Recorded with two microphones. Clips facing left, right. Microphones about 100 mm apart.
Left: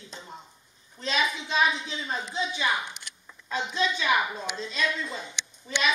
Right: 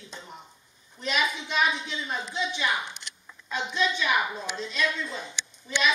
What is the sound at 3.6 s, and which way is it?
Speech, 30° left (ahead or behind).